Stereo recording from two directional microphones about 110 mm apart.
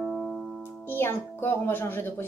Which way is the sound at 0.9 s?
20° left (ahead or behind).